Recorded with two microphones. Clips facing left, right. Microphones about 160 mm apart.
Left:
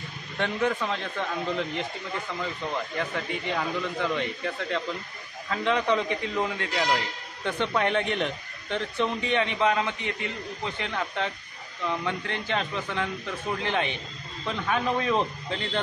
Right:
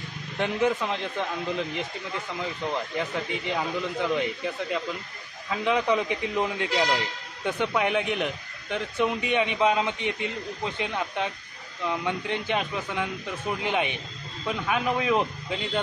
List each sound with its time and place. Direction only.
0.4 s a man's voice: 10° right (ahead or behind)
3.0 s a man's voice: 15° right (ahead or behind)